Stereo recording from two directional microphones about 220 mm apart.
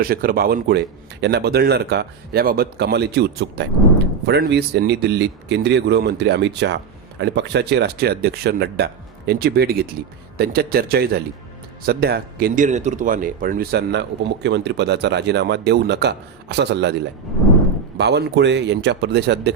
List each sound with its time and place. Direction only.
0.0 s speech: 40° right (ahead or behind)
17.9 s speech: 50° right (ahead or behind)